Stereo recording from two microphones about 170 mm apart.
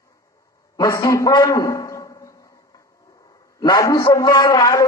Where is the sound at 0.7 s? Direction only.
20° left (ahead or behind).